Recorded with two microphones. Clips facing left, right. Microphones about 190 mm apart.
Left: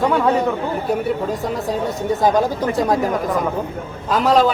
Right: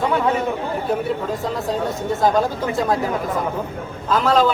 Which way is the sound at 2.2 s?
15° left (ahead or behind).